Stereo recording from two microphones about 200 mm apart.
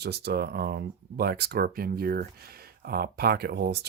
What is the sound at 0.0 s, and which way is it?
Speech, 55° right (ahead or behind).